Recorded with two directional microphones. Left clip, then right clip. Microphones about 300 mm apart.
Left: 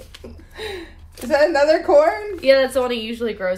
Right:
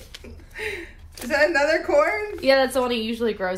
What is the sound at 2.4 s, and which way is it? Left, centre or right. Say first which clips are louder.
Speech: left 4 dB; centre.